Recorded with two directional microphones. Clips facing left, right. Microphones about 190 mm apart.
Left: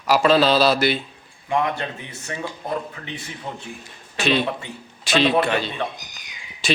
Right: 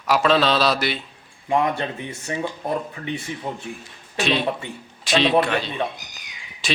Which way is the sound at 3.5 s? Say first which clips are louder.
Right 2 dB; 15° right (ahead or behind).